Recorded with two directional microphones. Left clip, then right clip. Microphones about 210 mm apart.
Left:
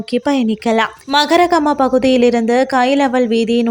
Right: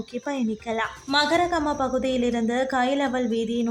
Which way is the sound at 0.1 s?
35° left (ahead or behind).